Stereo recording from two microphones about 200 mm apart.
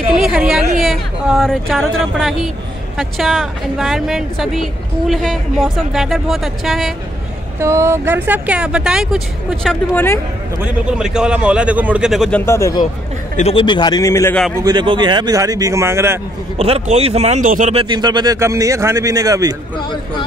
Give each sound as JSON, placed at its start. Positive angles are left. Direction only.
{"t": 0.2, "sound": "a woman's voice", "side_deg": 0}
{"t": 7.6, "sound": "a woman's voice", "side_deg": -15}
{"t": 13.4, "sound": "a man's voice", "side_deg": 30}
{"t": 14.6, "sound": "speech", "side_deg": -20}
{"t": 16.5, "sound": "speech", "side_deg": -30}